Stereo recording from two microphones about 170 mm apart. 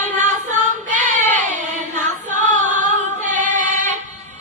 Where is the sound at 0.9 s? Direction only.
45° right (ahead or behind).